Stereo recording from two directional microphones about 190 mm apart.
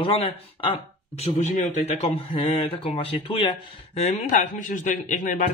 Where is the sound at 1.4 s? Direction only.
40° left (ahead or behind).